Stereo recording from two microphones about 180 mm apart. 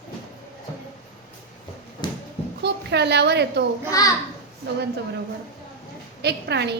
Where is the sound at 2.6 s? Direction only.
70° right (ahead or behind).